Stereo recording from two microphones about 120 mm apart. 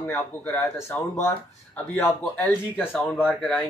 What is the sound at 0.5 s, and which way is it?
Speech, 15° left (ahead or behind).